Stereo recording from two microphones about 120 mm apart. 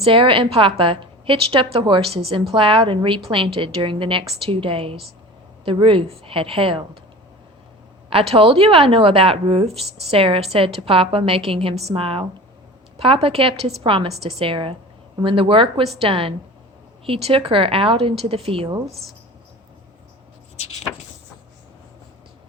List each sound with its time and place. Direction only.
0.0 s a woman's voice: 45° right (ahead or behind)
8.1 s a woman's voice: 55° right (ahead or behind)
14.2 s a woman's voice: 60° right (ahead or behind)